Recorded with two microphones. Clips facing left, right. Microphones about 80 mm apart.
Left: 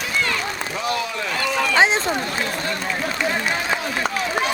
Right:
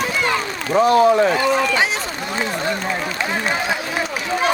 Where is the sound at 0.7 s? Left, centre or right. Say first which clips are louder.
Right 15 dB; right.